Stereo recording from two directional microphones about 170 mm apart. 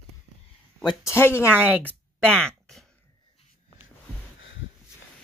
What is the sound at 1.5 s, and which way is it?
Speech, 10° right (ahead or behind).